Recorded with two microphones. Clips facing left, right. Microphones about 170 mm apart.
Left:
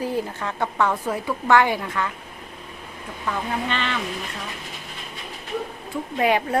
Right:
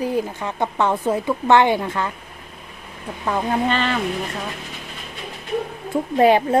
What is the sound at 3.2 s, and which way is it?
Speech, 40° right (ahead or behind).